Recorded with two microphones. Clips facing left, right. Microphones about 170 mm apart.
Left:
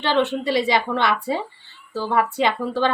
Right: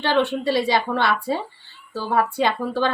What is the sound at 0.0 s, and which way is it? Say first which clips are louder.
Speech: even; 20° left (ahead or behind).